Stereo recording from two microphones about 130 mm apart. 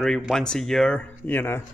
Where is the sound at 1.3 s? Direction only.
15° left (ahead or behind).